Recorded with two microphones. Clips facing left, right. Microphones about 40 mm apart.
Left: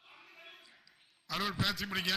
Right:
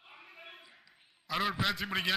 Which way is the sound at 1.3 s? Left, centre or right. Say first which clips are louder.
Right 3 dB; centre.